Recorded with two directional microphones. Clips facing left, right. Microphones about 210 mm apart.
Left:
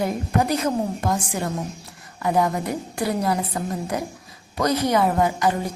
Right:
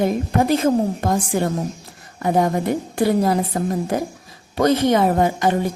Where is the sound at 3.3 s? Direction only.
40° right (ahead or behind).